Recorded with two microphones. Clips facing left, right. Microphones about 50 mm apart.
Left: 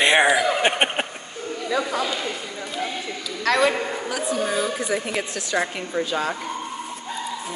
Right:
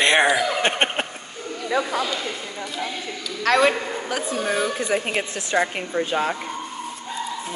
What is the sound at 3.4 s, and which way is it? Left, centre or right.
A man's voice, right.